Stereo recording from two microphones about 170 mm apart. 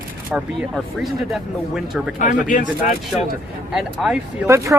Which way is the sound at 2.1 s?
50° left (ahead or behind).